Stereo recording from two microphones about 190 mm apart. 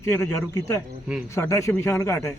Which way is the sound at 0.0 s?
15° left (ahead or behind).